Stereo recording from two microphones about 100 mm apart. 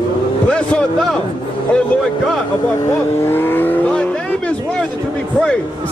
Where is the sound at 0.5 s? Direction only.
10° left (ahead or behind).